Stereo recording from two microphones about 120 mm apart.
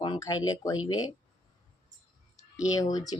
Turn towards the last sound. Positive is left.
turn(degrees=30)  # may be behind; listen again after turning